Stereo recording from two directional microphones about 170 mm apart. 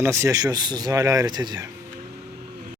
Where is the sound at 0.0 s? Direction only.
15° right (ahead or behind).